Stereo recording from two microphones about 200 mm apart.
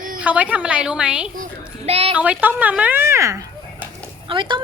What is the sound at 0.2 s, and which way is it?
Speech, 5° right (ahead or behind).